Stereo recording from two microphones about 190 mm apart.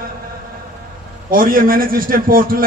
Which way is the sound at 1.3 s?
50° right (ahead or behind).